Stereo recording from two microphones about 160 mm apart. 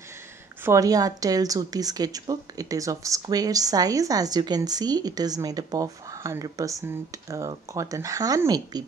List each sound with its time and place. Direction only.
0.7 s a woman's voice: 20° right (ahead or behind)